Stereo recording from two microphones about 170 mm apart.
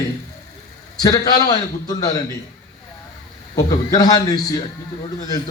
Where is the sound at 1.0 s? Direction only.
25° left (ahead or behind).